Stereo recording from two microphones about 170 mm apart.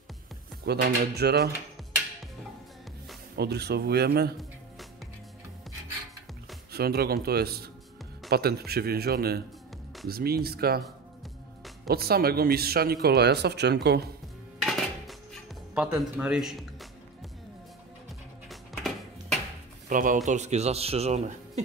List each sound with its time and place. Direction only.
0.7 s speech: 70° right (ahead or behind)
3.3 s speech: 75° right (ahead or behind)
6.7 s speech: 70° right (ahead or behind)
11.9 s speech: 65° right (ahead or behind)
14.6 s dishes: centre (ahead or behind)
15.7 s speech: 5° right (ahead or behind)
18.5 s music: centre (ahead or behind)
19.9 s speech: 50° right (ahead or behind)